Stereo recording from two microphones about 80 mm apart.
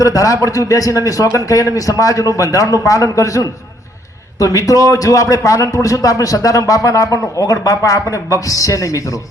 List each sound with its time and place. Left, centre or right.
0.0 s a man's voice: left